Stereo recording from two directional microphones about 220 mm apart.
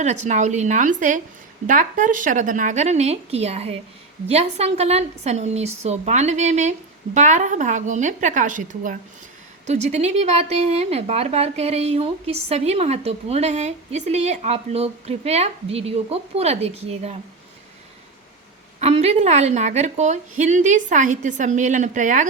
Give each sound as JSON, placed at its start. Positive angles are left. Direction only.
{"t": 0.0, "sound": "a woman's voice", "side_deg": -35}
{"t": 18.8, "sound": "a woman's voice", "side_deg": -30}